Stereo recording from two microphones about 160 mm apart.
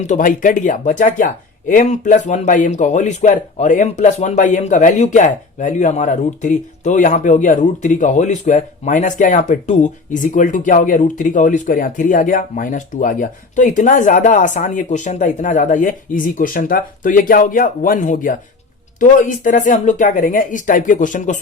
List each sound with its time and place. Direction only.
0.1 s speech: 55° left (ahead or behind)